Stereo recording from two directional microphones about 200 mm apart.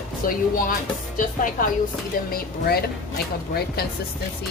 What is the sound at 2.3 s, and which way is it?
Speech, 50° left (ahead or behind).